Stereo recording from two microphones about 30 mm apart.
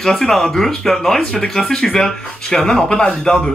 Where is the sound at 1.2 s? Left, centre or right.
Left.